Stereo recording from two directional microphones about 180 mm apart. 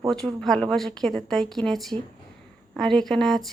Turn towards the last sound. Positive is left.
turn(degrees=0)  # may be behind; listen again after turning